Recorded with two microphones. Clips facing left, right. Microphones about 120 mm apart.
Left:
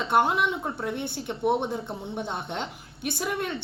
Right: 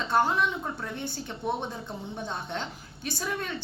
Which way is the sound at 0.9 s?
65° left (ahead or behind).